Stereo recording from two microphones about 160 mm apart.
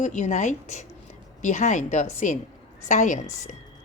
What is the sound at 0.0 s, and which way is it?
A woman's voice, 45° left (ahead or behind).